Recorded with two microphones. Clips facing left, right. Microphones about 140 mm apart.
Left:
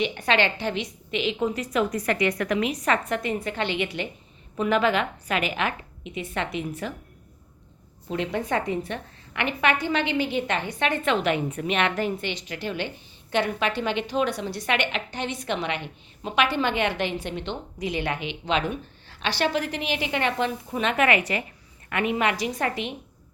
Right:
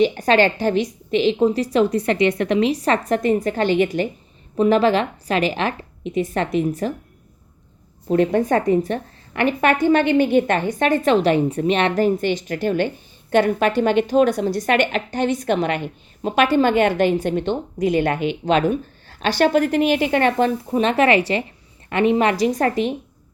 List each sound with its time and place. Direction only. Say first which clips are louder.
0.0 s a woman's voice: right 8 dB; 40° right (ahead or behind)
8.0 s a woman's voice: right 11 dB; 50° right (ahead or behind)